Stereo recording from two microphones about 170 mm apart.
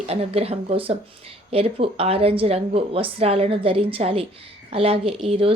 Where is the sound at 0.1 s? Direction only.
35° right (ahead or behind).